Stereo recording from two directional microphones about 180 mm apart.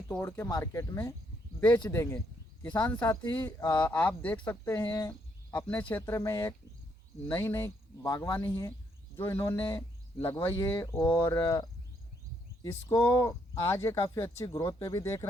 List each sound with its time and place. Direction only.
0.1 s speech: 10° left (ahead or behind)
12.9 s speech: 25° left (ahead or behind)